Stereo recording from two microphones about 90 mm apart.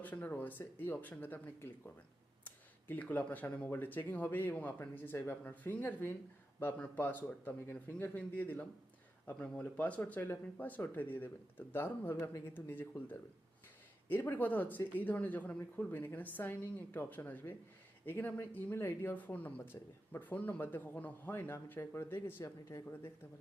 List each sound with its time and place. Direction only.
0.0 s speech: 20° left (ahead or behind)